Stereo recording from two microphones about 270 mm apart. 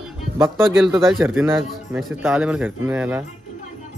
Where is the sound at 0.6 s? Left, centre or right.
Centre.